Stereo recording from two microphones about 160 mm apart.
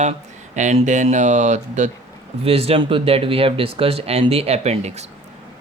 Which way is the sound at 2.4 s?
35° right (ahead or behind).